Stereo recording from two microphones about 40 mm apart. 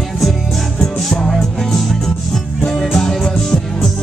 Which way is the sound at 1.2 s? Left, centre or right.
Centre.